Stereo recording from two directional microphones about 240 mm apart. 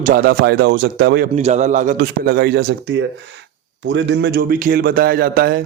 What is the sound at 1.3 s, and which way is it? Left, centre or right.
A man's voice, right.